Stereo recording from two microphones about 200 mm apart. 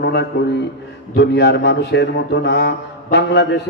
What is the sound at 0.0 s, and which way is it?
A man's voice, 60° left (ahead or behind).